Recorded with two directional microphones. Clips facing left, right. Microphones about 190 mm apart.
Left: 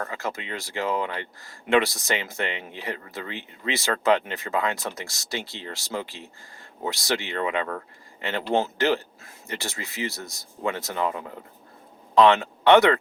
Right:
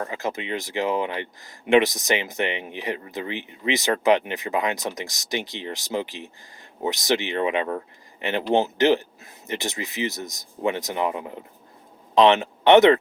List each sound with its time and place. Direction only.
0.0 s speech: 20° right (ahead or behind)